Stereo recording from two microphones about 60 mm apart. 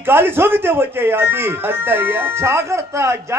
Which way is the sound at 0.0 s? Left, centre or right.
Right.